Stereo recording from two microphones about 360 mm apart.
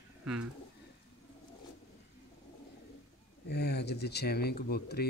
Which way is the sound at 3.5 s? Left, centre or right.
Left.